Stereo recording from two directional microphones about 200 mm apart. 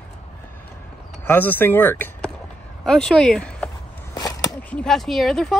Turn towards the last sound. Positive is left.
turn(degrees=0)  # may be behind; listen again after turning